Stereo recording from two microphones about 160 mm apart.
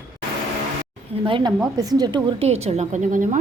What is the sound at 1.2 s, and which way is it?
A woman's voice, 30° right (ahead or behind).